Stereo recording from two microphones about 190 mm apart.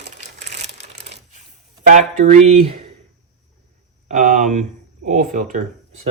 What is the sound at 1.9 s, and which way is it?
Speech, 40° right (ahead or behind).